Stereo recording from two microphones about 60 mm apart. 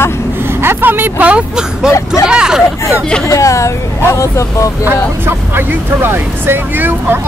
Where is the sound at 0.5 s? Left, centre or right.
Right.